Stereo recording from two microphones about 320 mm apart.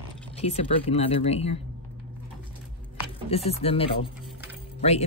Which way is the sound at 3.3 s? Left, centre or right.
Centre.